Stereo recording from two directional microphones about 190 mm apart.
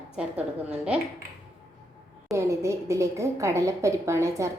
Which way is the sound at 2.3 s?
15° right (ahead or behind).